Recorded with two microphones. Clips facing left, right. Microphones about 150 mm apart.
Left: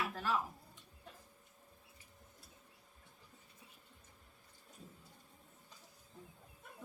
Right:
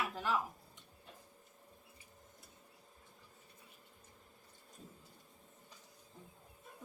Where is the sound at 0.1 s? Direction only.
15° right (ahead or behind).